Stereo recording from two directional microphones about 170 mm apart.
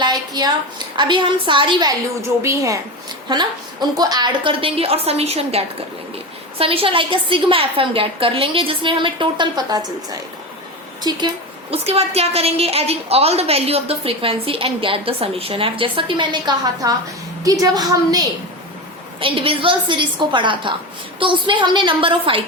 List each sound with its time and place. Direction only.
0.0 s a sound: 25° right (ahead or behind)
0.9 s a woman's voice: 30° right (ahead or behind)
2.4 s a woman's voice: 15° right (ahead or behind)
11.7 s a woman's voice: 35° right (ahead or behind); by 18.3 s 20° right (ahead or behind)
19.2 s a woman's voice: 30° right (ahead or behind)